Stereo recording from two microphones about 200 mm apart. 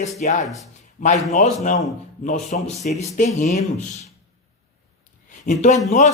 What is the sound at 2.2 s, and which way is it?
Speech, 30° left (ahead or behind).